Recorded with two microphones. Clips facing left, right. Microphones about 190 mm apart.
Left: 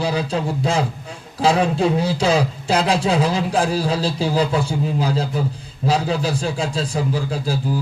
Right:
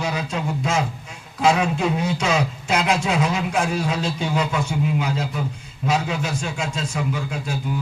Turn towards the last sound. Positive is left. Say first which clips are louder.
# left 4 dB
turn(degrees=35)  # may be behind; listen again after turning